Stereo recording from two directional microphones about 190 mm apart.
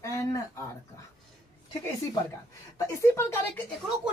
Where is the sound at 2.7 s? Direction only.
15° left (ahead or behind).